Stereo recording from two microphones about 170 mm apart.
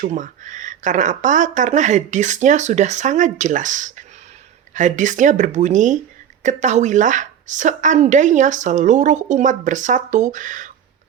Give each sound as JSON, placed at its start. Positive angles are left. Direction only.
{"t": 0.0, "sound": "a woman's voice", "side_deg": -50}